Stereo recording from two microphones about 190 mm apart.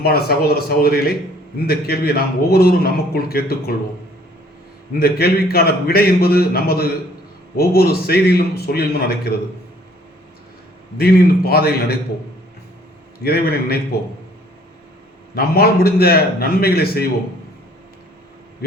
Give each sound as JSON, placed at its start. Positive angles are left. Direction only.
{"t": 0.0, "sound": "a man's voice", "side_deg": 55}
{"t": 4.9, "sound": "a man's voice", "side_deg": 55}
{"t": 10.9, "sound": "a man's voice", "side_deg": 55}
{"t": 13.2, "sound": "a man's voice", "side_deg": 55}
{"t": 15.4, "sound": "a man's voice", "side_deg": 55}